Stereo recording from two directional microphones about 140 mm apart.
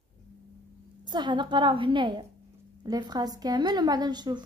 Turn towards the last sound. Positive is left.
turn(degrees=-30)  # may be behind; listen again after turning